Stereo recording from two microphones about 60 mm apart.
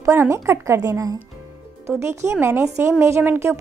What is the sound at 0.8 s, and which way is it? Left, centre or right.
Speech, right.